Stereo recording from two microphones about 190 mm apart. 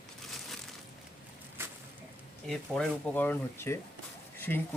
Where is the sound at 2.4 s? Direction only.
Centre (ahead or behind).